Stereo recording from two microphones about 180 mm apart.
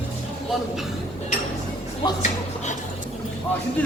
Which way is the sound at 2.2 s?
40° left (ahead or behind).